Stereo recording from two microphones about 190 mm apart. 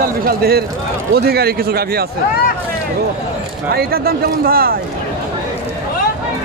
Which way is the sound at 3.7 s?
55° right (ahead or behind).